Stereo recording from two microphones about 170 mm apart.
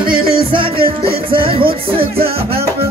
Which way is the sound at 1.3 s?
30° right (ahead or behind).